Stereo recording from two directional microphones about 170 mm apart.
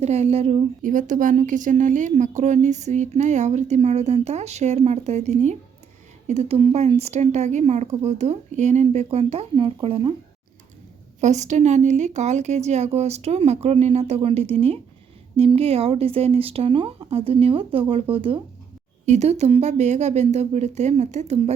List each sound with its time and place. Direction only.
0.0 s a woman's voice: 40° right (ahead or behind)
0.8 s a woman's voice: 50° right (ahead or behind); by 10.2 s 35° right (ahead or behind)
11.2 s a woman's voice: 45° right (ahead or behind)